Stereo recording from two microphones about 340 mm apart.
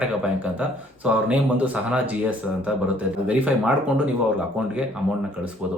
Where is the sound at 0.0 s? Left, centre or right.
Centre.